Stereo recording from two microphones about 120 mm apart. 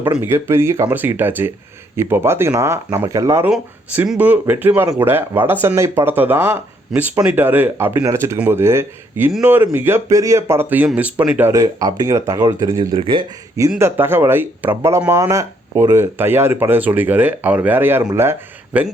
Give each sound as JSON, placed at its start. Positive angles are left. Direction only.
{"t": 0.0, "sound": "speech", "side_deg": -15}
{"t": 3.5, "sound": "speech", "side_deg": -10}
{"t": 11.5, "sound": "speech", "side_deg": -30}
{"t": 12.9, "sound": "speech", "side_deg": -45}
{"t": 13.6, "sound": "speech", "side_deg": -20}